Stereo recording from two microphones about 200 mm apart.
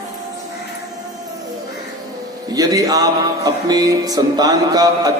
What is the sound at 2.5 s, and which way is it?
Speech, 20° right (ahead or behind).